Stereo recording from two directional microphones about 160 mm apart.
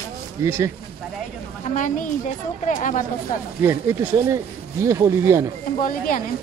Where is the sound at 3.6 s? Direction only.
15° right (ahead or behind).